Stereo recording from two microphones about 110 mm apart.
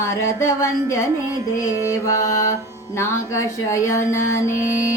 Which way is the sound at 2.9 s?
30° left (ahead or behind).